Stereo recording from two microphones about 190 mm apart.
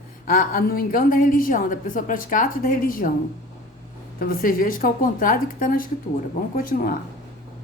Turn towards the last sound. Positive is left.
turn(degrees=50)  # may be behind; listen again after turning